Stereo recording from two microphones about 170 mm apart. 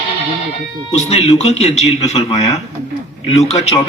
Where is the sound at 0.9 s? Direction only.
40° left (ahead or behind).